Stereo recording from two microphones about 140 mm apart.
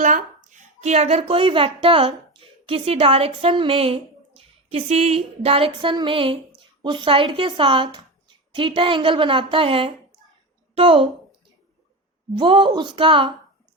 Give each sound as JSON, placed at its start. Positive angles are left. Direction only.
{"t": 0.0, "sound": "a woman's voice", "side_deg": -65}
{"t": 12.3, "sound": "a woman's voice", "side_deg": -35}